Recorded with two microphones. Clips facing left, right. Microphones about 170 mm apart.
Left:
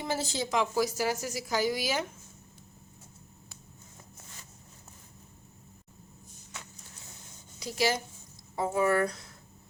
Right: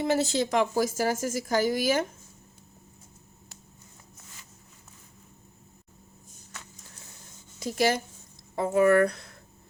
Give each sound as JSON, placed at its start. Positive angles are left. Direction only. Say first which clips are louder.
{"t": 0.0, "sound": "a woman's voice", "louder": "right 7 dB", "side_deg": -65}
{"t": 7.6, "sound": "a woman's voice", "louder": "right 4 dB", "side_deg": -50}
{"t": 8.5, "sound": "speech", "louder": "right 6 dB", "side_deg": -60}